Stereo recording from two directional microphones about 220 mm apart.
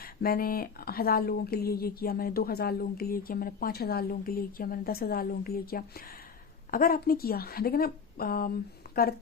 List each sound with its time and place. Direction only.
0.0 s a woman's voice: 40° left (ahead or behind)